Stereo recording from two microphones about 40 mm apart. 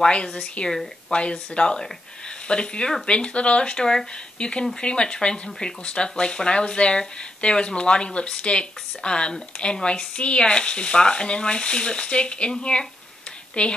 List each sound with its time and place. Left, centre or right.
0.0 s speech: left